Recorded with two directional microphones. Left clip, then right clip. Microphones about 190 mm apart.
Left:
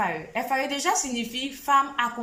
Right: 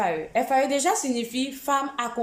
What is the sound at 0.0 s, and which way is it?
A woman's voice, 20° right (ahead or behind).